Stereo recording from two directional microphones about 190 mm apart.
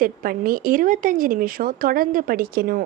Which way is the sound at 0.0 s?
50° right (ahead or behind).